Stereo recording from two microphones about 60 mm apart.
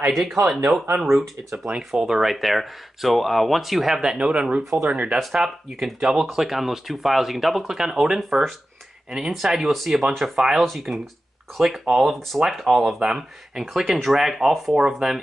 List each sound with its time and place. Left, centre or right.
0.1 s speech: centre
4.2 s speech: centre
5.3 s speech: centre